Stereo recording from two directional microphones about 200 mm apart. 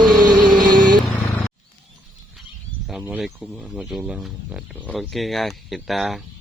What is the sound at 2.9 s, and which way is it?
Speech, 5° right (ahead or behind).